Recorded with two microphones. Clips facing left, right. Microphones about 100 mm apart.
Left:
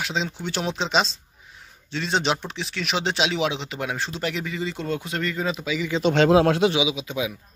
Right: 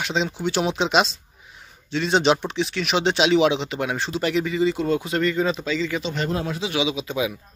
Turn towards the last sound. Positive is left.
turn(degrees=0)  # may be behind; listen again after turning